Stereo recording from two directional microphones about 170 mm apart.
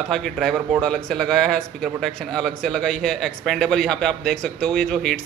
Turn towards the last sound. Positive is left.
turn(degrees=5)  # may be behind; listen again after turning